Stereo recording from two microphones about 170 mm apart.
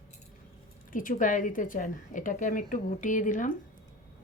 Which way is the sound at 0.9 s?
50° left (ahead or behind).